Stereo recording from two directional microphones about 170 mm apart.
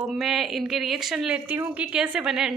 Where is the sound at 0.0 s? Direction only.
Centre (ahead or behind).